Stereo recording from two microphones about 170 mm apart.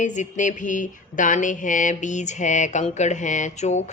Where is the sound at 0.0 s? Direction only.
45° left (ahead or behind).